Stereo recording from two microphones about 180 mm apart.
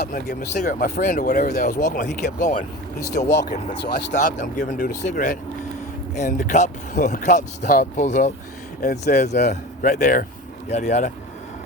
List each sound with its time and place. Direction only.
0.0 s speech: 50° left (ahead or behind)
3.2 s speech: 75° left (ahead or behind)
4.1 s speech: 50° left (ahead or behind)